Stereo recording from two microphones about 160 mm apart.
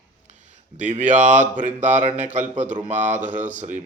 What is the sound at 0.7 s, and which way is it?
Speech, 50° right (ahead or behind).